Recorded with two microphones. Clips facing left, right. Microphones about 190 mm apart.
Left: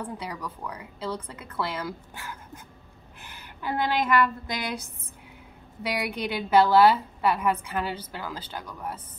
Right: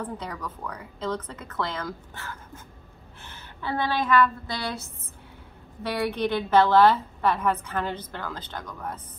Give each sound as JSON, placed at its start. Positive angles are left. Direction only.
{"t": 0.0, "sound": "a woman's voice", "side_deg": 10}